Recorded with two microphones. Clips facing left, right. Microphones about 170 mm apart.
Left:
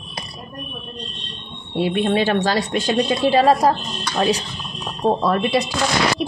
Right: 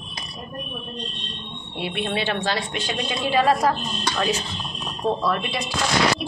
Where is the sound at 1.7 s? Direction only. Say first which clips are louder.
Left 8 dB; 40° left (ahead or behind).